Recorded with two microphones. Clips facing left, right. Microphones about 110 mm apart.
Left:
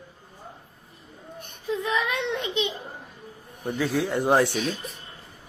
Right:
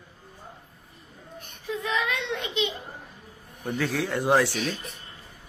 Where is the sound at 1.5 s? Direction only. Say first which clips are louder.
Left 3 dB; 20° left (ahead or behind).